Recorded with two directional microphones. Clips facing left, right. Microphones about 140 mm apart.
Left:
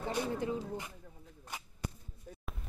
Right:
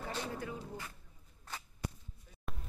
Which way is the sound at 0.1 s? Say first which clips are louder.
Left 6 dB; 15° left (ahead or behind).